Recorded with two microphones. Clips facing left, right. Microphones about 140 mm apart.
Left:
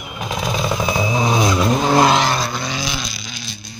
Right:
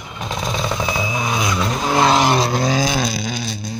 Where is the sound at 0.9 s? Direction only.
25° left (ahead or behind).